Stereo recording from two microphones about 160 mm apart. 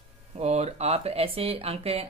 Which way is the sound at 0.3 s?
40° right (ahead or behind).